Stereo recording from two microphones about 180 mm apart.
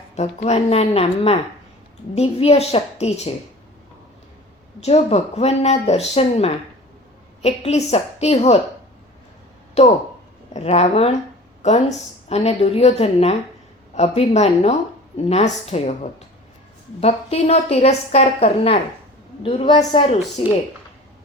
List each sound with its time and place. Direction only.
0.2 s a woman's voice: 35° left (ahead or behind)
4.8 s a woman's voice: 35° left (ahead or behind)
9.8 s a woman's voice: 35° left (ahead or behind)
17.0 s a woman's voice: 35° left (ahead or behind)